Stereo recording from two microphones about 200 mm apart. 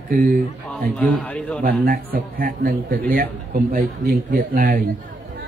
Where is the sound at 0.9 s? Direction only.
5° left (ahead or behind).